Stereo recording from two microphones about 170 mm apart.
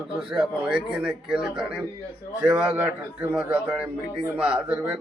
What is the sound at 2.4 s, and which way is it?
A man's voice, 10° right (ahead or behind).